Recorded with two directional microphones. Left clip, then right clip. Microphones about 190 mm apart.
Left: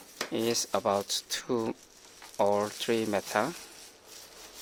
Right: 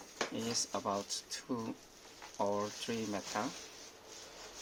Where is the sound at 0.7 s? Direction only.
50° left (ahead or behind).